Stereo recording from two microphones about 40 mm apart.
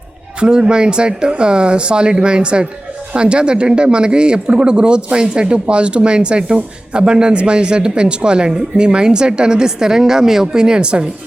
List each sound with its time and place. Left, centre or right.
0.3 s a man's voice: right